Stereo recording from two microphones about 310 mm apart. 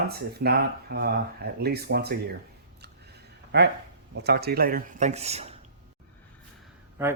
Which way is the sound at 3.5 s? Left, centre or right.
Right.